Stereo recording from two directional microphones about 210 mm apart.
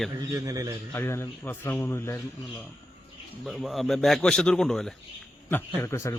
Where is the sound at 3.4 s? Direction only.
Centre (ahead or behind).